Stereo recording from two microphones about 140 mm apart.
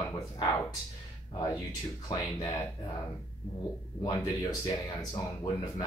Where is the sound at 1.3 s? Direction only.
30° left (ahead or behind).